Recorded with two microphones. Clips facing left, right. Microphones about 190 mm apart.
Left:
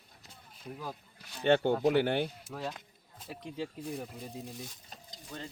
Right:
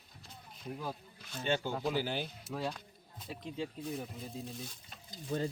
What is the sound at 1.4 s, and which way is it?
Speech, 60° left (ahead or behind).